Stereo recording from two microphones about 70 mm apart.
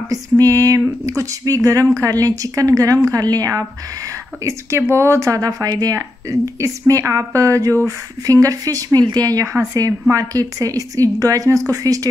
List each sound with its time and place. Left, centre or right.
0.1 s a woman's voice: right
4.5 s a woman's voice: right